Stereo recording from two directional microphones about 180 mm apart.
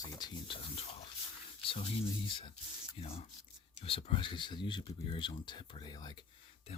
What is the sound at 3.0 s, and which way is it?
Speech, 35° left (ahead or behind).